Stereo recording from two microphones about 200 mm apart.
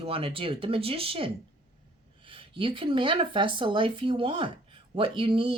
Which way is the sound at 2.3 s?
25° right (ahead or behind).